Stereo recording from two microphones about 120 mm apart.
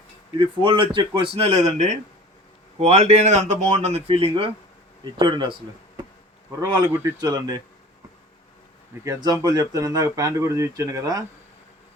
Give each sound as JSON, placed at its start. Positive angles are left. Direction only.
{"t": 0.3, "sound": "speech", "side_deg": -45}
{"t": 1.4, "sound": "speech", "side_deg": -65}
{"t": 5.0, "sound": "speech", "side_deg": -40}
{"t": 6.6, "sound": "speech", "side_deg": -30}
{"t": 9.0, "sound": "speech", "side_deg": -35}